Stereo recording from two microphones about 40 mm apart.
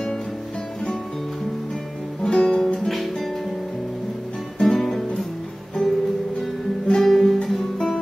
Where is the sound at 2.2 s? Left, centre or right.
Centre.